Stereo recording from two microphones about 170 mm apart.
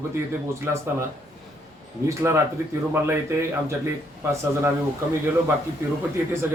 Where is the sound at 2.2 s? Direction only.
15° right (ahead or behind).